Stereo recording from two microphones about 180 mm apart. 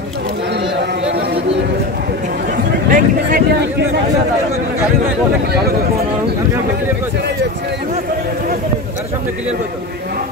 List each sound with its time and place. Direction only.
2.9 s vehicle: 55° right (ahead or behind)